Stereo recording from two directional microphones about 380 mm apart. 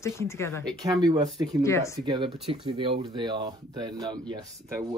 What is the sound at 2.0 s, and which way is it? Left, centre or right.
Speech, centre.